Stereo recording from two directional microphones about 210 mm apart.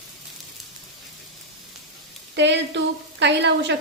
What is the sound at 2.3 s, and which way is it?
A woman's voice, 55° right (ahead or behind).